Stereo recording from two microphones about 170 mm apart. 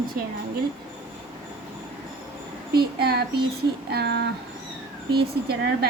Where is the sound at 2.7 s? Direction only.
70° right (ahead or behind).